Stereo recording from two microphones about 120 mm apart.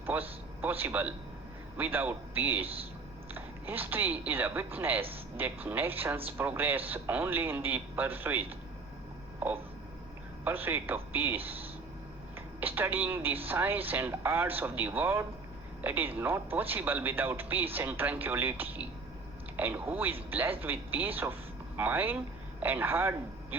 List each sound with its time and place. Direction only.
0.0 s a man's voice: 15° right (ahead or behind)
10.4 s speech: 15° right (ahead or behind)
12.5 s speech: 15° right (ahead or behind)